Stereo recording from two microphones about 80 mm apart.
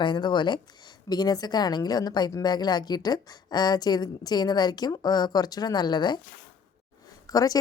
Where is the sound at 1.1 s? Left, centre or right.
Left.